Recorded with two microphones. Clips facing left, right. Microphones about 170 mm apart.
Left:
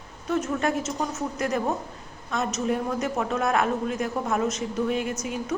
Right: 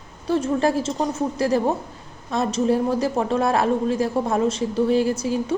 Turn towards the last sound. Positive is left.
turn(degrees=-30)  # may be behind; listen again after turning